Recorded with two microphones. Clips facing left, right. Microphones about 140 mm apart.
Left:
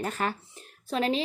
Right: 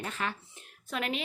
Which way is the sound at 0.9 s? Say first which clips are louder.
Left 7 dB; 30° left (ahead or behind).